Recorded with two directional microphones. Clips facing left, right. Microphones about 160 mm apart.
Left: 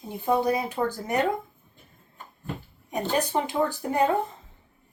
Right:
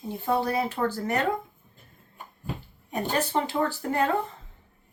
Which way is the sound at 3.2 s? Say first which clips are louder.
Left 1 dB; 15° left (ahead or behind).